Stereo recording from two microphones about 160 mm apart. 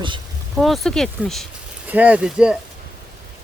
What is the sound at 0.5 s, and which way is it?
Speech, centre (ahead or behind).